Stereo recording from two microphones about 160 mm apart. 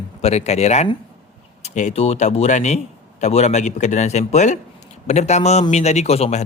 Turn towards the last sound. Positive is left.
turn(degrees=40)  # may be behind; listen again after turning